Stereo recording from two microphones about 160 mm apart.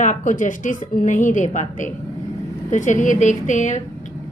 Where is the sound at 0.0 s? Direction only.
55° left (ahead or behind).